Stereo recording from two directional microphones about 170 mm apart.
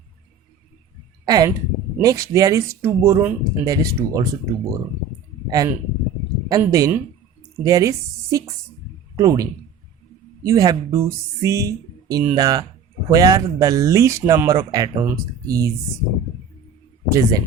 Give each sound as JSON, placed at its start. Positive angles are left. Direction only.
{"t": 1.2, "sound": "speech", "side_deg": -20}
{"t": 17.1, "sound": "speech", "side_deg": -20}